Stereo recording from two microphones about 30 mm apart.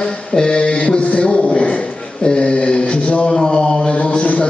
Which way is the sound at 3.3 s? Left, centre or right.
Centre.